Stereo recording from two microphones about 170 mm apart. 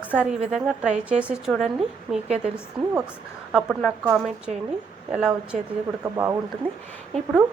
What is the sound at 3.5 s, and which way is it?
A woman's voice, 5° right (ahead or behind).